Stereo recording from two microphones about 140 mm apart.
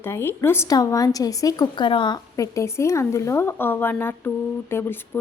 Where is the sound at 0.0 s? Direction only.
15° left (ahead or behind).